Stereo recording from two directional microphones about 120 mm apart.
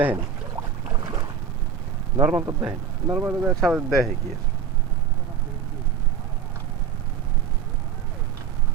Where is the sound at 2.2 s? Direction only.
25° right (ahead or behind).